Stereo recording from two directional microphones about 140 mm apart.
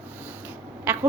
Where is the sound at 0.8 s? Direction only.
15° right (ahead or behind).